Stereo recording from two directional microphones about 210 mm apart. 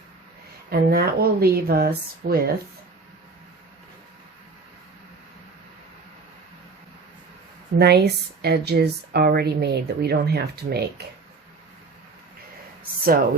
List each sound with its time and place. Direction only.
0.7 s a woman's voice: 45° right (ahead or behind)
7.8 s a woman's voice: 50° right (ahead or behind)